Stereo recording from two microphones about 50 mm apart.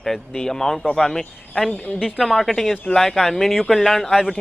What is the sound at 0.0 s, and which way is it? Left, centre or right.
Speech, centre.